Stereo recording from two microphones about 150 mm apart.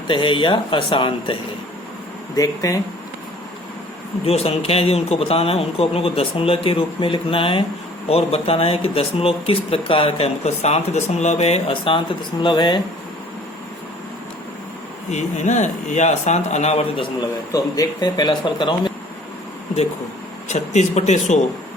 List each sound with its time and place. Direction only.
0.1 s speech: 35° left (ahead or behind)
2.3 s speech: 20° left (ahead or behind)
4.3 s speech: 40° left (ahead or behind)
15.1 s speech: 50° left (ahead or behind)
17.2 s speech: 25° left (ahead or behind)
20.5 s speech: 50° left (ahead or behind)